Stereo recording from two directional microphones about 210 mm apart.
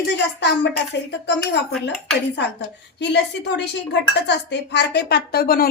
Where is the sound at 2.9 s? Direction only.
55° left (ahead or behind).